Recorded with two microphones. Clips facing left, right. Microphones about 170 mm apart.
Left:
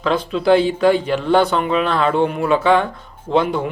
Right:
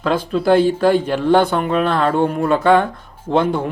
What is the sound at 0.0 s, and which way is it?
Speech, 50° right (ahead or behind).